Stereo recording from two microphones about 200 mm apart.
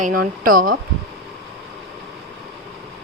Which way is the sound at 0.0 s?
45° right (ahead or behind).